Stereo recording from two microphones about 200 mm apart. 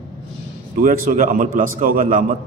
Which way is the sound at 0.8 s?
45° right (ahead or behind).